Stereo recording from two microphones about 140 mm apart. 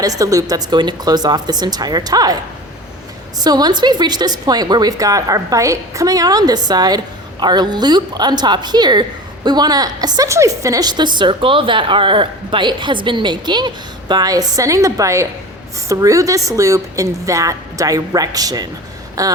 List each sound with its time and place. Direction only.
0.0 s a woman's voice: 25° right (ahead or behind)